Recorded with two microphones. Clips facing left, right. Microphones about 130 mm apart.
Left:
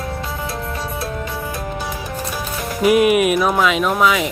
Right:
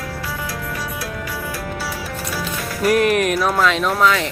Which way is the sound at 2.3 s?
20° left (ahead or behind).